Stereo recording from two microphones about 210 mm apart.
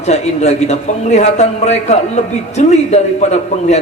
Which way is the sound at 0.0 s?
30° left (ahead or behind).